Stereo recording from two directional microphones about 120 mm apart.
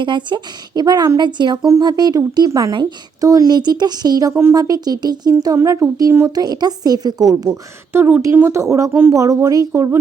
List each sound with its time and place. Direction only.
0.0 s speech: 40° right (ahead or behind)
7.9 s speech: 20° right (ahead or behind)